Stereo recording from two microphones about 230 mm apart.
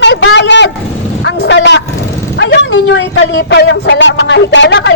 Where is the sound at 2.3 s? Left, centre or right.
Left.